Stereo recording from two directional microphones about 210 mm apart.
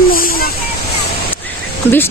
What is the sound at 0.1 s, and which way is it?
Waterfall, 45° left (ahead or behind).